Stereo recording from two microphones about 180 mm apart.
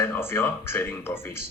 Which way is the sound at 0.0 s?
15° left (ahead or behind).